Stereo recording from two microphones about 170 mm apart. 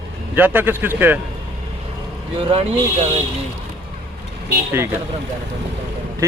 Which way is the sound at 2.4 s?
35° right (ahead or behind).